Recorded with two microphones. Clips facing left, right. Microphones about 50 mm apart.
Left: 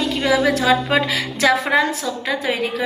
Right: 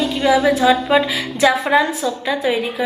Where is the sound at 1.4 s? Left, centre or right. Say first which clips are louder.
Right 2 dB; left.